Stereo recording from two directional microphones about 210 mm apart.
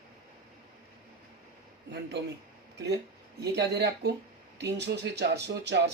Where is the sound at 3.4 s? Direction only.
50° right (ahead or behind).